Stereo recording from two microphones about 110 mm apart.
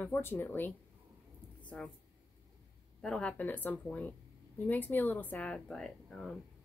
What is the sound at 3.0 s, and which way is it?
A woman's voice, 10° left (ahead or behind).